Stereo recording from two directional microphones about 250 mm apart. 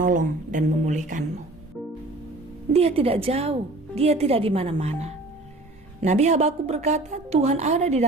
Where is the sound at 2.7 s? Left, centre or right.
Right.